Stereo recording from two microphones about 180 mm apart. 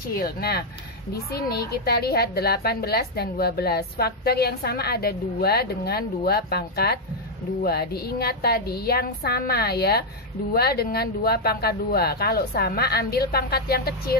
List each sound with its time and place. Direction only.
0.1 s a woman's voice: 55° left (ahead or behind)